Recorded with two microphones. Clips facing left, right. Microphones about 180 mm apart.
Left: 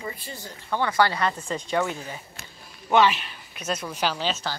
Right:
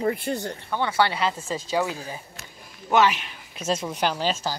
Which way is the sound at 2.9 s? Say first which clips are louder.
Even; 10° right (ahead or behind).